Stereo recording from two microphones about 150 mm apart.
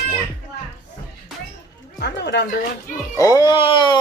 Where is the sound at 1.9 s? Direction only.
90° left.